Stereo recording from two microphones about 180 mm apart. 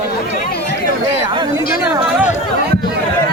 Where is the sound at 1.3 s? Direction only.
25° right (ahead or behind).